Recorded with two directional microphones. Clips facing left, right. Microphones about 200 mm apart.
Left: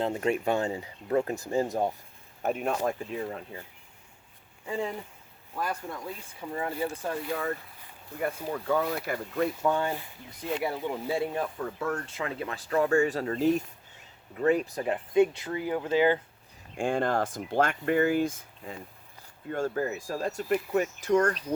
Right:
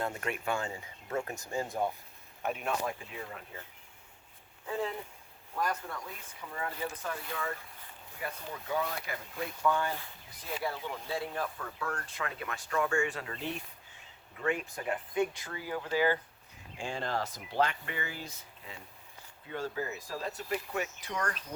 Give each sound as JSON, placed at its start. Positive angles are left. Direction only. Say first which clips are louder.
{"t": 0.0, "sound": "speech", "louder": "left 8 dB", "side_deg": 30}
{"t": 4.6, "sound": "speech", "louder": "left 3 dB", "side_deg": 10}
{"t": 6.4, "sound": "speech", "louder": "left 6 dB", "side_deg": 25}
{"t": 8.2, "sound": "speech", "louder": "left 9 dB", "side_deg": 50}
{"t": 9.0, "sound": "speech", "louder": "left 10 dB", "side_deg": 45}
{"t": 9.6, "sound": "speech", "louder": "left 3 dB", "side_deg": 25}
{"t": 16.7, "sound": "speech", "louder": "left 8 dB", "side_deg": 55}